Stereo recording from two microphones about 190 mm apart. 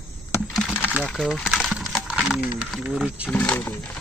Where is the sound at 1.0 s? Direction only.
Centre (ahead or behind).